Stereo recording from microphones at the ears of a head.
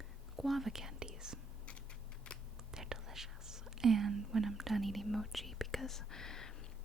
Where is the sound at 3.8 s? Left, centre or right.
Right.